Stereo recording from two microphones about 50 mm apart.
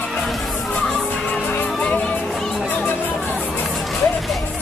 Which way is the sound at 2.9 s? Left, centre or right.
Left.